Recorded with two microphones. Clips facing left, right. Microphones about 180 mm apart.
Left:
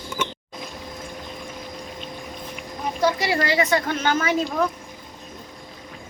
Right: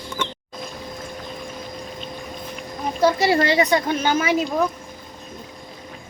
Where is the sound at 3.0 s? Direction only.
30° right (ahead or behind); by 4.7 s 10° right (ahead or behind).